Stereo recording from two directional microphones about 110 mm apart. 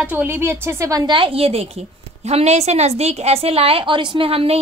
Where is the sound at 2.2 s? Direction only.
85° right; by 4.5 s 60° right (ahead or behind).